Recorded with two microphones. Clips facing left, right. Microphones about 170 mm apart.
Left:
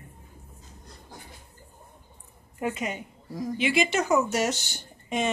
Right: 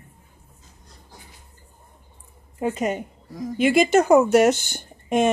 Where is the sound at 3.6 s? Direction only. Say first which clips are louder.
Right 9 dB; 45° right (ahead or behind).